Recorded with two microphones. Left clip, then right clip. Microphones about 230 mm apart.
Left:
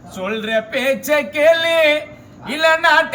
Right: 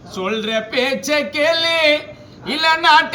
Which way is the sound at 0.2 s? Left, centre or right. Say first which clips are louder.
Left 1 dB; centre.